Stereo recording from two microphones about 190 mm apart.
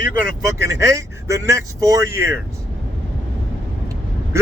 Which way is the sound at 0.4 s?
15° right (ahead or behind).